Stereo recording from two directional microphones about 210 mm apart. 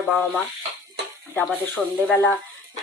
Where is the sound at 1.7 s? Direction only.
5° left (ahead or behind).